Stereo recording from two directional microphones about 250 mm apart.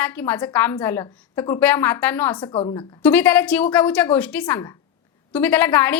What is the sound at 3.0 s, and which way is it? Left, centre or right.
A woman's voice, centre.